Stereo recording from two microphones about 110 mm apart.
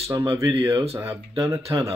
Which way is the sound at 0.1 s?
45° right (ahead or behind).